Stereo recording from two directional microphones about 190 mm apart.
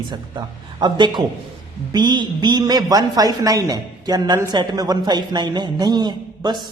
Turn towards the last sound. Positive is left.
turn(degrees=-25)  # may be behind; listen again after turning